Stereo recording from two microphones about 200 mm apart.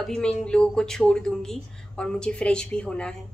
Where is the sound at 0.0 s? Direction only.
5° left (ahead or behind).